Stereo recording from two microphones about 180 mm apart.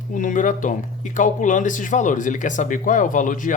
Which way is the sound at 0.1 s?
45° left (ahead or behind).